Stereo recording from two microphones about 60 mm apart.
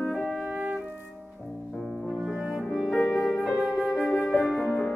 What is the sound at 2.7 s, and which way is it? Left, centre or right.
Music, centre.